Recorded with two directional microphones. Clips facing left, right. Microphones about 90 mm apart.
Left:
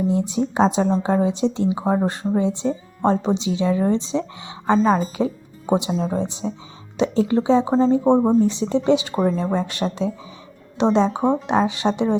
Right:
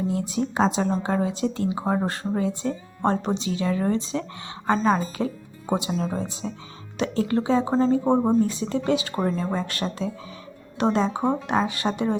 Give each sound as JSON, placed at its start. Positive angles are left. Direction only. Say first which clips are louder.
{"t": 0.1, "sound": "speech", "louder": "left 4 dB", "side_deg": 25}
{"t": 10.9, "sound": "speech", "louder": "left 5 dB", "side_deg": 20}